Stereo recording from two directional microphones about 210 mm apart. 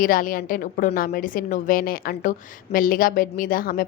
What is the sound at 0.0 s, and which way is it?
A woman's voice, 40° left (ahead or behind).